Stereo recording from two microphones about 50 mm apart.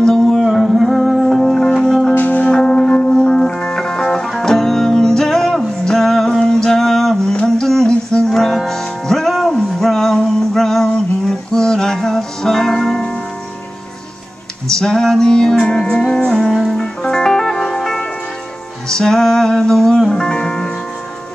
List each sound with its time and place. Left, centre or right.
0.0 s music: centre
2.1 s music: left
2.5 s music: centre
6.4 s a sound: centre
7.9 s music: centre
14.7 s music: centre